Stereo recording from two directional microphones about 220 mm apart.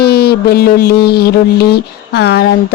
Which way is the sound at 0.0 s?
45° left (ahead or behind).